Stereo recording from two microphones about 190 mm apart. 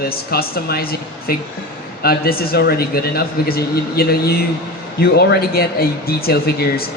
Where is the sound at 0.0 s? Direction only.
55° left (ahead or behind).